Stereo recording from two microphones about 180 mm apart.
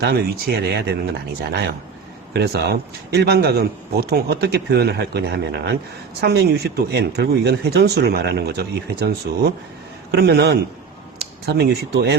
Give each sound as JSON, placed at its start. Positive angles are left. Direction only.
{"t": 0.0, "sound": "speech", "side_deg": -65}